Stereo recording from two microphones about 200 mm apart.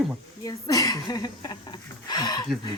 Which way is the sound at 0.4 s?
15° left (ahead or behind).